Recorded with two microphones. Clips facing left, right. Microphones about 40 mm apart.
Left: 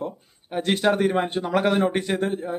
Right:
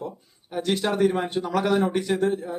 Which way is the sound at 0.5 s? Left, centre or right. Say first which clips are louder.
Left 3 dB; left.